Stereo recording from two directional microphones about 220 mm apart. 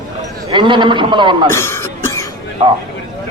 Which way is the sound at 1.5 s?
10° left (ahead or behind).